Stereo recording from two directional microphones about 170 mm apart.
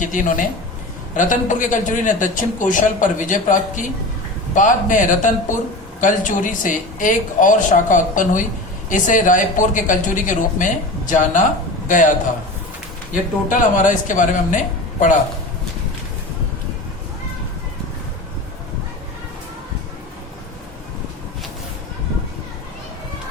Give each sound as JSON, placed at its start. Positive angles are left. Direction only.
{"t": 0.0, "sound": "a man's voice", "side_deg": 50}
{"t": 13.5, "sound": "speech", "side_deg": 50}